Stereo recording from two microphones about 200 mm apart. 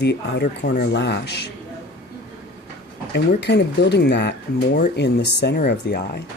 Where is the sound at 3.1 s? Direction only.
55° left (ahead or behind).